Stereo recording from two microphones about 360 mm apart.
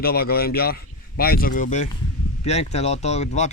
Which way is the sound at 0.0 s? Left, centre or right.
Left.